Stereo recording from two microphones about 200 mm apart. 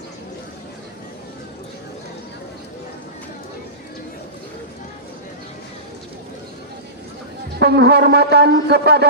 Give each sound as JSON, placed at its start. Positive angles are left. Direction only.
{"t": 7.6, "sound": "shofar", "side_deg": -55}